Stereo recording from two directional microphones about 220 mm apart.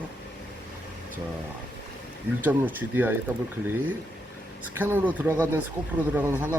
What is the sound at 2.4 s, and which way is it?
Speech, 10° right (ahead or behind).